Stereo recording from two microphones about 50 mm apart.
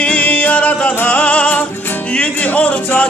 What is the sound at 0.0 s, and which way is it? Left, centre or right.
Music, left.